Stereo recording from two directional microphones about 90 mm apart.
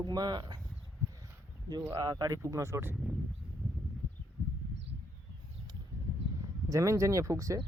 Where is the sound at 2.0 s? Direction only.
45° right (ahead or behind); by 2.9 s 30° right (ahead or behind).